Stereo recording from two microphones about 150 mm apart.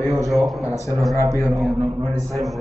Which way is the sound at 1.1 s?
20° right (ahead or behind).